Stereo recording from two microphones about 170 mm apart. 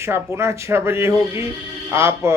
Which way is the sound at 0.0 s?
15° right (ahead or behind).